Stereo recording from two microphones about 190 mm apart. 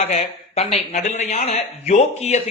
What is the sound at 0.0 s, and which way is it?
A man's voice, 35° left (ahead or behind).